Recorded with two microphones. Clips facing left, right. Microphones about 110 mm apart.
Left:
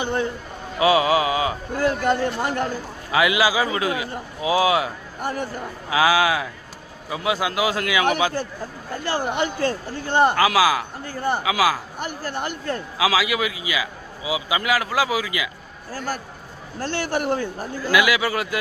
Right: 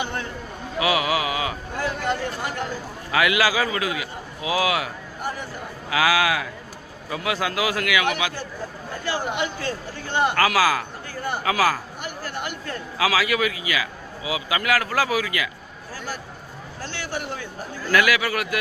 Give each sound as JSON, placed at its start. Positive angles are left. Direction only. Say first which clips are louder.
{"t": 0.0, "sound": "a man's voice", "louder": "left 5 dB", "side_deg": 25}
{"t": 1.8, "sound": "speech", "louder": "left 5 dB", "side_deg": 45}
{"t": 3.1, "sound": "a man's voice", "louder": "left 2 dB", "side_deg": 20}
{"t": 5.9, "sound": "a man's voice", "louder": "left 2 dB", "side_deg": 25}
{"t": 8.0, "sound": "speech", "louder": "left 4 dB", "side_deg": 40}
{"t": 10.3, "sound": "a man's voice", "louder": "left 2 dB", "side_deg": 20}
{"t": 11.1, "sound": "speech", "louder": "left 5 dB", "side_deg": 30}
{"t": 11.4, "sound": "speech", "louder": "right 1 dB", "side_deg": 15}
{"t": 11.9, "sound": "speech", "louder": "left 3 dB", "side_deg": 35}
{"t": 13.0, "sound": "a man's voice", "louder": "even", "side_deg": 20}
{"t": 15.9, "sound": "a man's voice", "louder": "left 5 dB", "side_deg": 40}
{"t": 17.9, "sound": "a man's voice", "louder": "left 1 dB", "side_deg": 20}